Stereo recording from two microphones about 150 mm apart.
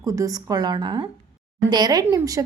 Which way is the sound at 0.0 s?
25° right (ahead or behind).